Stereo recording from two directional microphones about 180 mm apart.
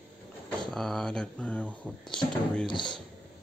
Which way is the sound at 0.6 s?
Centre (ahead or behind).